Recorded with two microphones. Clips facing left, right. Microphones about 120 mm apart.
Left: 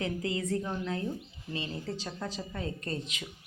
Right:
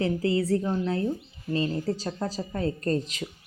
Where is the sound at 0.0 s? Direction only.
35° right (ahead or behind).